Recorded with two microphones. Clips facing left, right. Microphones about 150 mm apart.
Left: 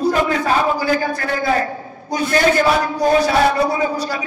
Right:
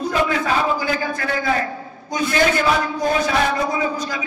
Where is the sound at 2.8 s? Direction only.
35° left (ahead or behind).